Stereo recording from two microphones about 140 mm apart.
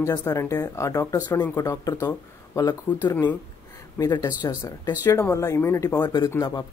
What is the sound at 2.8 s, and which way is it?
Speech, 15° left (ahead or behind).